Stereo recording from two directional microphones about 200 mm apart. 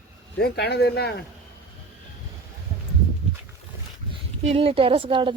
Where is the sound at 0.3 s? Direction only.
55° left (ahead or behind).